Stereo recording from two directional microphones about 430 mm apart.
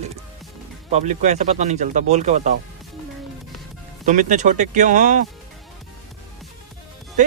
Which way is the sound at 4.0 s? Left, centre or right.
Centre.